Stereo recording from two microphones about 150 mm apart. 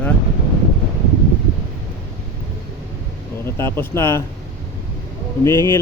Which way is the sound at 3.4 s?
15° left (ahead or behind).